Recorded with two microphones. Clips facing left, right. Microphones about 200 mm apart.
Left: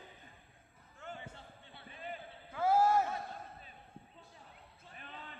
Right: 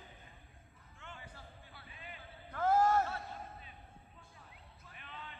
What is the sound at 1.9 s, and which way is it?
Basketball bounce, 40° left (ahead or behind).